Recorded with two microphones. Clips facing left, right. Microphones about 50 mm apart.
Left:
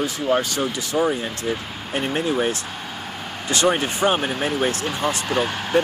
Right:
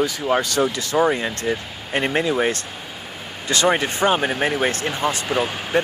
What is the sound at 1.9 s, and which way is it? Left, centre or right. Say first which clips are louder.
Speech: right 2 dB; right.